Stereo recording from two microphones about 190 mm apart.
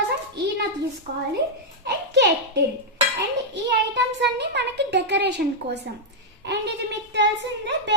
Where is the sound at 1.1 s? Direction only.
55° right (ahead or behind).